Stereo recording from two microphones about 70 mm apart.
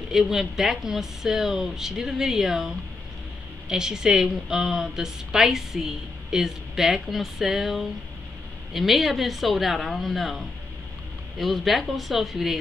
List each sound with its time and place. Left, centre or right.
0.1 s a woman's voice: centre